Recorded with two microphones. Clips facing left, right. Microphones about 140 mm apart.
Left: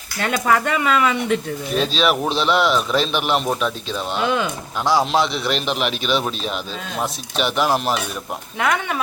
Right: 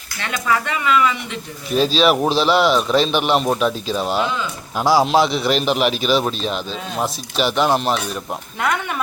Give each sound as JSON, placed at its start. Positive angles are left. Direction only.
{"t": 0.2, "sound": "speech", "side_deg": 45}
{"t": 1.8, "sound": "a man's voice", "side_deg": 0}